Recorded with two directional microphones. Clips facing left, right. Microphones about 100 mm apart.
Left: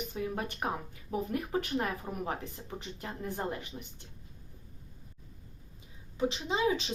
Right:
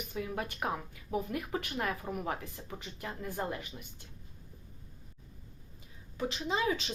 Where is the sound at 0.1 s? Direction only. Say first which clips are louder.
Left 1 dB; 30° left (ahead or behind).